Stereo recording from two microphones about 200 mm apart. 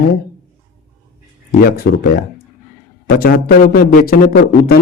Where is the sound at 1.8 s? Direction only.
50° left (ahead or behind).